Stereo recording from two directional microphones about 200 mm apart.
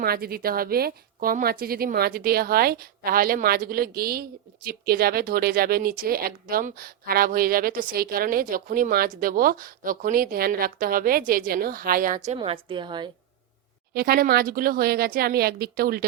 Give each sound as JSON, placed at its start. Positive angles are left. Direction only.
{"t": 0.0, "sound": "a woman's voice", "side_deg": -50}
{"t": 13.9, "sound": "a woman's voice", "side_deg": -50}